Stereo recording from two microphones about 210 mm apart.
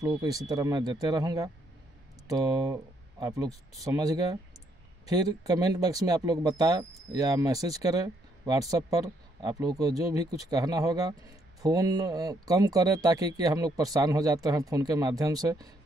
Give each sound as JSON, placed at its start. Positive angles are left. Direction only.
{"t": 0.0, "sound": "speech", "side_deg": -15}